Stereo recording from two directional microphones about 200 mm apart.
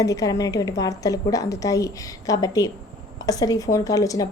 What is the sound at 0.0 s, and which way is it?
A woman's voice, 15° left (ahead or behind).